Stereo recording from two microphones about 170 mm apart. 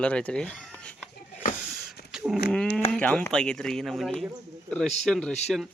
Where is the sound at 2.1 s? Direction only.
5° right (ahead or behind).